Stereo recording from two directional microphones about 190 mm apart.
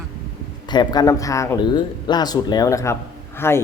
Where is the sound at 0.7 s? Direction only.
25° left (ahead or behind).